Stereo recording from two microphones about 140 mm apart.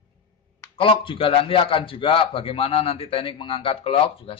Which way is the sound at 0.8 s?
40° left (ahead or behind).